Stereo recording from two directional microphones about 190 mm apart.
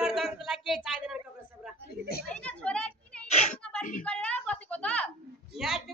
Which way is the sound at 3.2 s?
35° left (ahead or behind).